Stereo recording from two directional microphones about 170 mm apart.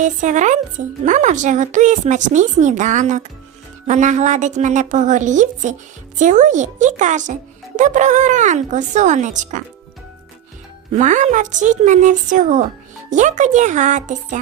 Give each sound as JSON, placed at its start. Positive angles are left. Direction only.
{"t": 0.0, "sound": "speech", "side_deg": -45}
{"t": 10.9, "sound": "speech", "side_deg": -45}